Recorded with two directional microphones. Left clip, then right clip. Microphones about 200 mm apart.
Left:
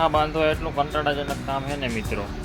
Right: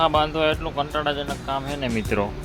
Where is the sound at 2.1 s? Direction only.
45° right (ahead or behind).